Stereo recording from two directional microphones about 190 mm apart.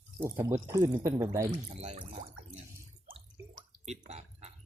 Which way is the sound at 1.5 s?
35° right (ahead or behind).